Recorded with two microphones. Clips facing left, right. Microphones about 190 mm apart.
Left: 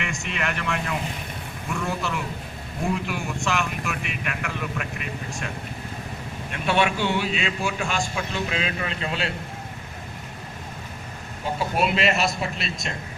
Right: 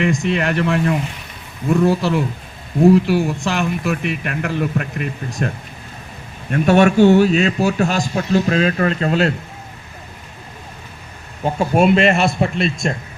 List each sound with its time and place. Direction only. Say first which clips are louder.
0.0 s speech: right 11 dB; 35° right (ahead or behind)
6.5 s a man's voice: right 10 dB; 45° right (ahead or behind)
11.6 s a man's voice: right 9 dB; 45° right (ahead or behind)